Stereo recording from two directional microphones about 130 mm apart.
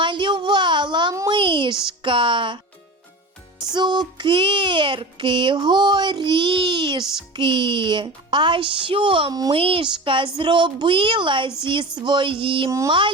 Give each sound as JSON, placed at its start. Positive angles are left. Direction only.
{"t": 0.0, "sound": "a sound", "side_deg": -40}
{"t": 1.9, "sound": "child singing", "side_deg": -40}
{"t": 3.8, "sound": "child singing", "side_deg": -35}